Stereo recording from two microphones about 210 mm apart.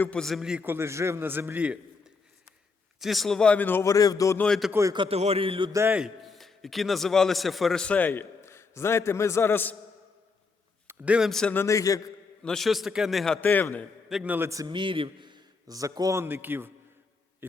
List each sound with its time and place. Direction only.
0.0 s a man's voice: 5° left (ahead or behind)
4.7 s a man's voice: 15° right (ahead or behind)
5.0 s a man's voice: 30° right (ahead or behind)
5.8 s a man's voice: 5° right (ahead or behind); by 9.7 s 10° left (ahead or behind)
10.8 s a man's voice: 5° right (ahead or behind); by 12.1 s 15° left (ahead or behind)
12.4 s a man's voice: centre (ahead or behind)
14.2 s a man's voice: 10° right (ahead or behind)